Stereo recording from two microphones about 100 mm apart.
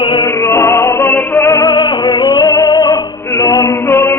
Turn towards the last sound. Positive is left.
turn(degrees=25)  # may be behind; listen again after turning